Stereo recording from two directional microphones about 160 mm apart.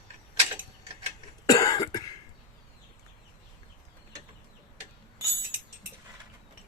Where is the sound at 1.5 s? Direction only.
25° left (ahead or behind).